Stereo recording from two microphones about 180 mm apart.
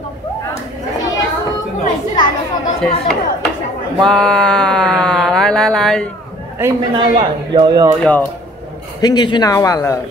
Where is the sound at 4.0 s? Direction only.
5° left (ahead or behind).